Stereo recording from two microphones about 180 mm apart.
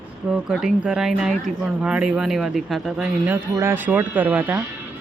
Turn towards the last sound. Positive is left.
turn(degrees=-10)  # may be behind; listen again after turning